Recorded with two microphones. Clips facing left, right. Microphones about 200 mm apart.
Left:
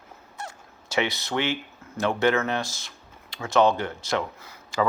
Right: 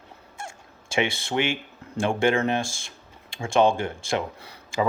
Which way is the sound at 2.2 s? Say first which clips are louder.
Right 1 dB; 25° right (ahead or behind).